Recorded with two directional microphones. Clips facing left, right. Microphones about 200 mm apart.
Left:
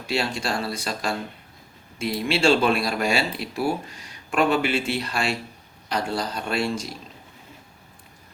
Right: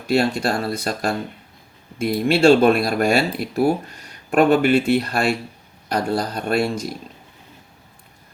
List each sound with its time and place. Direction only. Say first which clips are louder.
0.1 s speech: right 7 dB; 55° right (ahead or behind)